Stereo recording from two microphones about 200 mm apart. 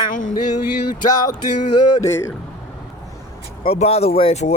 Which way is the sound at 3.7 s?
30° left (ahead or behind).